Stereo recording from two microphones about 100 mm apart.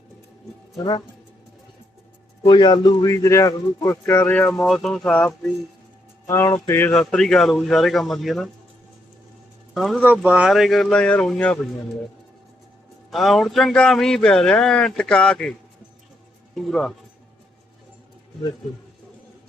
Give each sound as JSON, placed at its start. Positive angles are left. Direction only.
{"t": 2.6, "sound": "a man's voice", "side_deg": 50}
{"t": 3.1, "sound": "speech", "side_deg": 30}
{"t": 4.3, "sound": "speech", "side_deg": 15}
{"t": 6.2, "sound": "speech", "side_deg": 25}
{"t": 7.1, "sound": "speech", "side_deg": 5}
{"t": 9.7, "sound": "speech", "side_deg": 0}
{"t": 10.0, "sound": "speech", "side_deg": -15}
{"t": 13.1, "sound": "speech", "side_deg": 0}
{"t": 16.6, "sound": "speech", "side_deg": 0}